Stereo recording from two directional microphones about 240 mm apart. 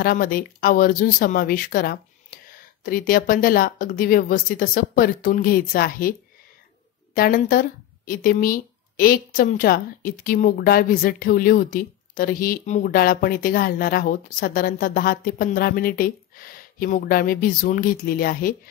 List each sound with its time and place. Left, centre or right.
0.0 s speech: left
7.2 s speech: left